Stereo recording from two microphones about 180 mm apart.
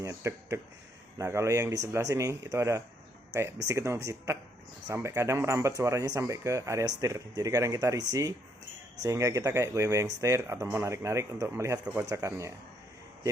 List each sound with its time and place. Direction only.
0.0 s speech: 15° right (ahead or behind)